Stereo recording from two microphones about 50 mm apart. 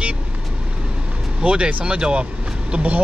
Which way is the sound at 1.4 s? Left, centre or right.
Right.